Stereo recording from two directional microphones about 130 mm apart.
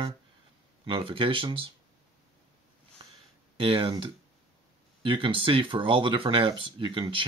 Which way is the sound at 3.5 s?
40° right (ahead or behind).